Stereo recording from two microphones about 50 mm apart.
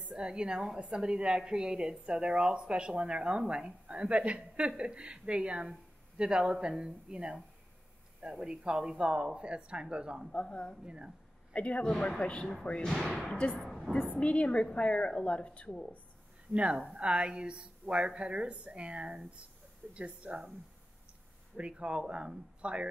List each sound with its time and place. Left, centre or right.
0.1 s a woman's voice: centre
10.3 s a woman's voice: left
13.1 s a woman's voice: centre
14.2 s a woman's voice: left
16.7 s a woman's voice: centre
21.5 s a woman's voice: right